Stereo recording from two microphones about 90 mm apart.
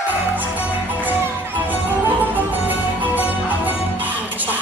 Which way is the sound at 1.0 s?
20° right (ahead or behind).